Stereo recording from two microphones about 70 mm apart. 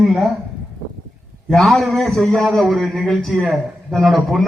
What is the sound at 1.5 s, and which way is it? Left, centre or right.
Speech, centre.